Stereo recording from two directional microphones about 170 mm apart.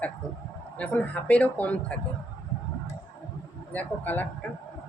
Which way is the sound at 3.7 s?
10° left (ahead or behind).